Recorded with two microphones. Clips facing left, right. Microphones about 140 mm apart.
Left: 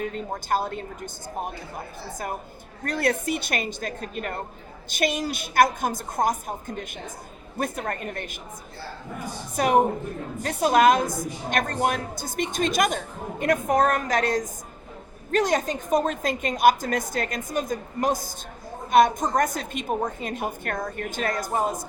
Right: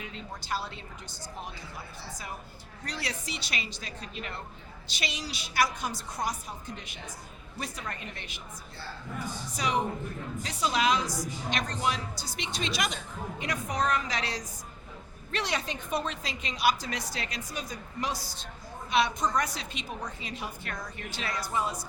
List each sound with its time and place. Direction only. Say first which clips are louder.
0.0 s a woman's voice: left 11 dB; 50° left (ahead or behind)